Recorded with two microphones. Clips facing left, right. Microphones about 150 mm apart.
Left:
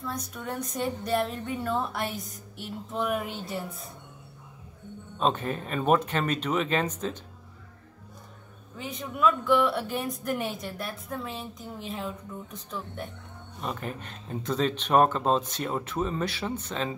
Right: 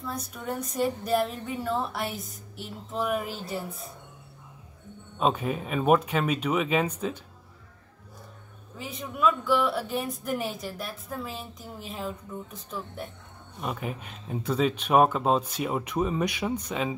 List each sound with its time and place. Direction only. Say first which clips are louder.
0.0 s speech: even; 5° right (ahead or behind)
5.2 s speech: right 1 dB; 10° right (ahead or behind)
8.7 s speech: left 1 dB; 5° right (ahead or behind)